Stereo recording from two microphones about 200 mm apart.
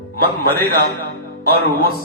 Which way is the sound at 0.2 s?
50° right (ahead or behind).